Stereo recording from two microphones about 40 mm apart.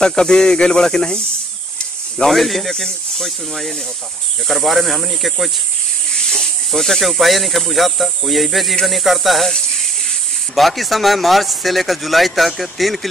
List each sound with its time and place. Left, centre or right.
0.0 s speech: centre
2.2 s speech: centre
6.1 s snake: centre
6.7 s speech: centre
10.5 s speech: centre